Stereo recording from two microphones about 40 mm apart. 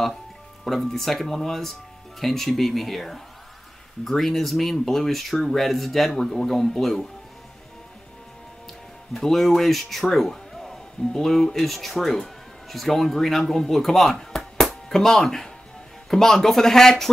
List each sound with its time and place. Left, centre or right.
0.7 s speech: centre
9.2 s speech: centre
14.6 s music: centre
16.1 s speech: centre